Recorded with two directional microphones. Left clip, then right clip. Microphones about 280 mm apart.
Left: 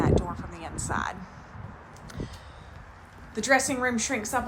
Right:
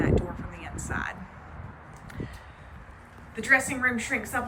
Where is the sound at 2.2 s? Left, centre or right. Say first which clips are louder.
Even; centre.